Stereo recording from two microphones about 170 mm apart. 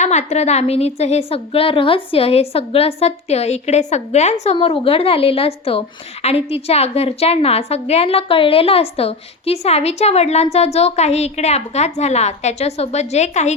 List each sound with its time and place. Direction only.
0.0 s a woman's voice: 40° left (ahead or behind)